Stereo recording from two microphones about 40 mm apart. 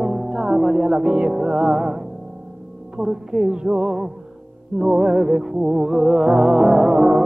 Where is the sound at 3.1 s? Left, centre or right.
Centre.